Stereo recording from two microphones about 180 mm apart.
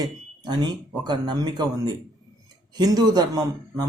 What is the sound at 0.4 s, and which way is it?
Speech, 25° right (ahead or behind).